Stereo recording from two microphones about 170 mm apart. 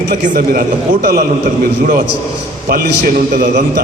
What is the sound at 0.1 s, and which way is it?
Speech, 55° right (ahead or behind).